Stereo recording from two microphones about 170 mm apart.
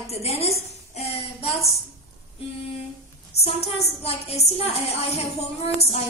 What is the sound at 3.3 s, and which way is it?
A woman's voice, 40° left (ahead or behind).